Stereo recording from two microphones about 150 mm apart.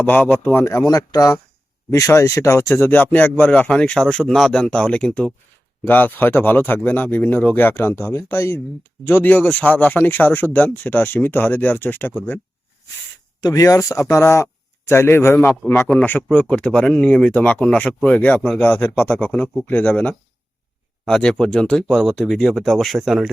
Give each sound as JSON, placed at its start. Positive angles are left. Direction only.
{"t": 0.0, "sound": "speech", "side_deg": 10}
{"t": 13.4, "sound": "speech", "side_deg": 25}
{"t": 18.6, "sound": "speech", "side_deg": 10}